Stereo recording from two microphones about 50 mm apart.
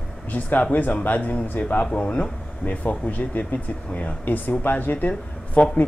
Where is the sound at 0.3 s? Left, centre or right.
Left.